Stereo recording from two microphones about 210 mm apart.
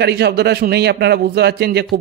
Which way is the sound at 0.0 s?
50° right (ahead or behind).